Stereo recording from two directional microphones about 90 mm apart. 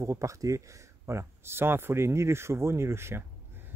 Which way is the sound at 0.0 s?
35° right (ahead or behind).